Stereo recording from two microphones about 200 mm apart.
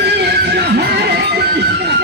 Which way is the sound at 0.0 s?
55° right (ahead or behind).